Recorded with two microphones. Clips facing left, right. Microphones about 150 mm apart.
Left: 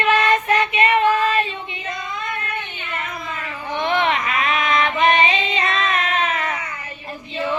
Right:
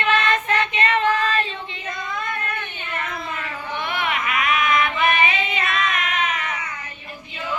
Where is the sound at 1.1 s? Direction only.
30° left (ahead or behind).